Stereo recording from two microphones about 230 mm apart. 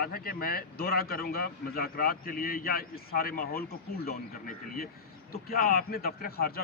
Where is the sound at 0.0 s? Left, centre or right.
Left.